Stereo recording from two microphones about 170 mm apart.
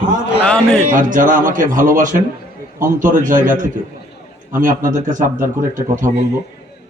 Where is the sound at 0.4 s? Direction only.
5° left (ahead or behind).